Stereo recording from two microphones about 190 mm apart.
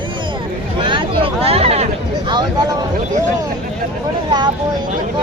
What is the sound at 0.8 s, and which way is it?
Hubbub, 25° right (ahead or behind).